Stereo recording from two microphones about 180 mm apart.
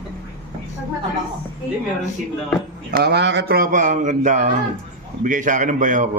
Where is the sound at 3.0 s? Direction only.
65° right (ahead or behind); by 6.0 s 45° right (ahead or behind).